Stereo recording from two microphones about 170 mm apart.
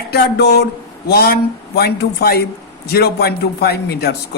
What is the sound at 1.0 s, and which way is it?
A man's voice, 65° left (ahead or behind).